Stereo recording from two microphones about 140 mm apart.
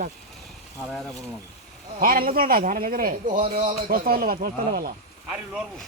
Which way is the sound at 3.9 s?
90° right.